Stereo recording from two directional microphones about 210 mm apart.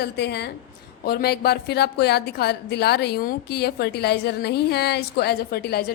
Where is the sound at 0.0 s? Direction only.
50° left (ahead or behind).